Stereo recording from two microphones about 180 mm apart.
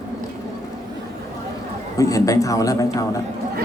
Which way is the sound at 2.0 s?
20° left (ahead or behind).